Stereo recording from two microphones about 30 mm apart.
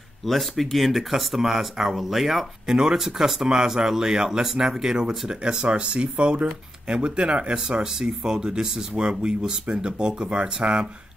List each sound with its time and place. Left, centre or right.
0.2 s speech: centre
2.6 s speech: right
7.8 s speech: centre; by 10.8 s right